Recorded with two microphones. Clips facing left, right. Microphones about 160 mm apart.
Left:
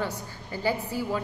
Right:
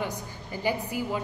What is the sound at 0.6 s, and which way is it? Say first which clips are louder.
Speech: left 1 dB; 15° right (ahead or behind).